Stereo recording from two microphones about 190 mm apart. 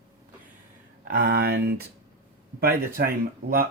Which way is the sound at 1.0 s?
50° right (ahead or behind).